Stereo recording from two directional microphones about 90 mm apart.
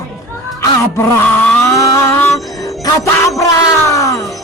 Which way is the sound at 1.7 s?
35° left (ahead or behind).